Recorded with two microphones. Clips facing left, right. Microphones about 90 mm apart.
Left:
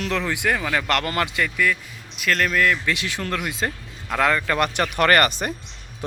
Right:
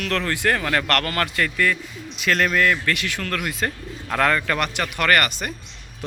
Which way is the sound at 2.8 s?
25° left (ahead or behind).